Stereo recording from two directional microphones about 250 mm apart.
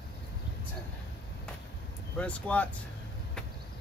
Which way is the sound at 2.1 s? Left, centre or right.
Centre.